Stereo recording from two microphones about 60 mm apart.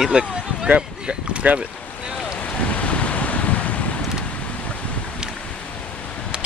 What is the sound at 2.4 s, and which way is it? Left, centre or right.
Wind, left.